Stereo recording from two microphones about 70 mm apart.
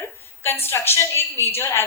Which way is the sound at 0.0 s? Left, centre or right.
Left.